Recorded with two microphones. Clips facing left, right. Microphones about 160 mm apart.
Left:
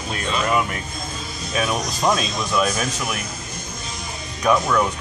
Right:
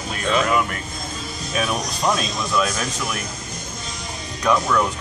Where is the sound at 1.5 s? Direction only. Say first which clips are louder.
Left 1 dB; centre (ahead or behind).